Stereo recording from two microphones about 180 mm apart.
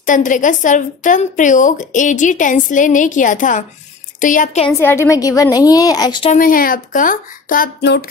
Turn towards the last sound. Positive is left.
turn(degrees=50)  # may be behind; listen again after turning